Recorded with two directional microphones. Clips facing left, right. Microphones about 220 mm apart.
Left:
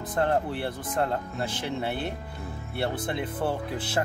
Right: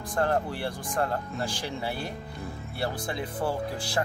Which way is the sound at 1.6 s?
60° left (ahead or behind).